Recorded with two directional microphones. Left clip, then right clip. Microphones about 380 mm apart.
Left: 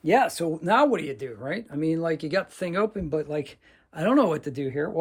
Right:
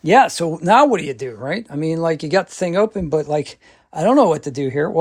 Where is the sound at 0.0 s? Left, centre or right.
Right.